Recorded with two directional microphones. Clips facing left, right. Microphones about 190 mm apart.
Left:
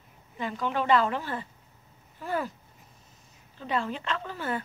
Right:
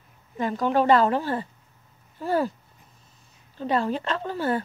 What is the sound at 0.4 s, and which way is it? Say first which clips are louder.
Speech: right 7 dB; 40° right (ahead or behind).